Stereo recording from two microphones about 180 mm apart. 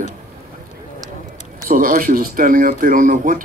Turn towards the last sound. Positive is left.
turn(degrees=-50)  # may be behind; listen again after turning